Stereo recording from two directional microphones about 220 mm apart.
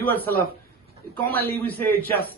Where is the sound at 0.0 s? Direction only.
10° left (ahead or behind).